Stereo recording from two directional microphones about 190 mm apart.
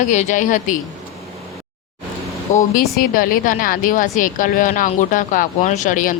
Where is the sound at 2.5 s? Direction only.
40° left (ahead or behind).